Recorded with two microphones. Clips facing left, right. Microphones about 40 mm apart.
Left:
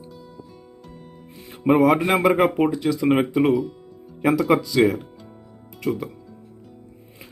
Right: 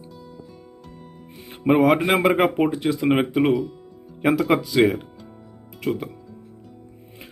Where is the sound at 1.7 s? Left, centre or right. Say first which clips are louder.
Even; right.